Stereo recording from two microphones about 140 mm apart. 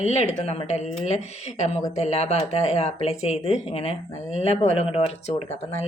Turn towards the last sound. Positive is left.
turn(degrees=45)  # may be behind; listen again after turning